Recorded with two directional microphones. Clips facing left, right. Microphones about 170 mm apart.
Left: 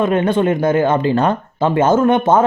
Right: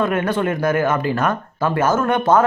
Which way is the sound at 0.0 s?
25° left (ahead or behind).